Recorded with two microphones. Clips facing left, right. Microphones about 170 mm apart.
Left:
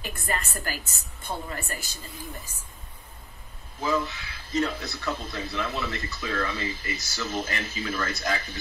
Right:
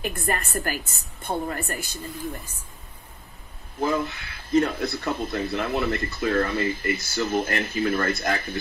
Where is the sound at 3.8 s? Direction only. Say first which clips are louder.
Right 2 dB; 55° right (ahead or behind).